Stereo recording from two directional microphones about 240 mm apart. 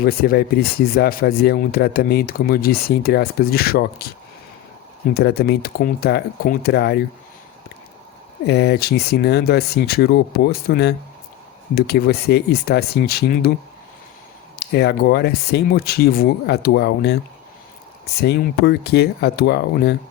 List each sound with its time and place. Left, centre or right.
0.0 s speech: left
5.1 s speech: left
8.4 s speech: left
14.6 s speech: left